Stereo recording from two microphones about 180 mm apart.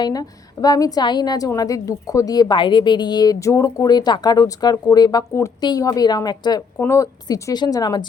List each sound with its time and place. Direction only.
0.0 s a woman's voice: 20° left (ahead or behind)